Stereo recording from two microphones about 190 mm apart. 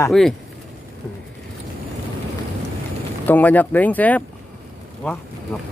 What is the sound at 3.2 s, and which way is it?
Speech, 10° left (ahead or behind).